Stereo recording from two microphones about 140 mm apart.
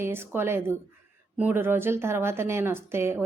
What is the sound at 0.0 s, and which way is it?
A woman's voice, 15° right (ahead or behind).